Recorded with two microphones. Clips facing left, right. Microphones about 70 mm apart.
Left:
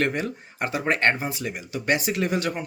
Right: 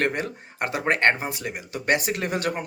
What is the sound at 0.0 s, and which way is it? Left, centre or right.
Speech, right.